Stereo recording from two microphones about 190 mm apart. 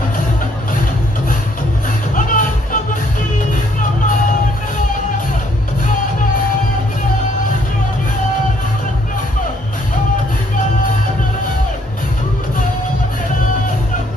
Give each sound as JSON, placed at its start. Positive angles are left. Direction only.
{"t": 2.1, "sound": "music", "side_deg": 45}